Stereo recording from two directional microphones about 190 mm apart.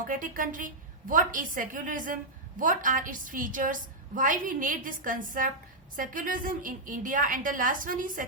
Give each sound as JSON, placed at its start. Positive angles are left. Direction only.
{"t": 0.1, "sound": "a woman's voice", "side_deg": -45}